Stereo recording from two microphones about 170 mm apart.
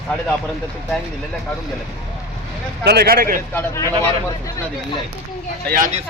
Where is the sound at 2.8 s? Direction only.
75° right (ahead or behind).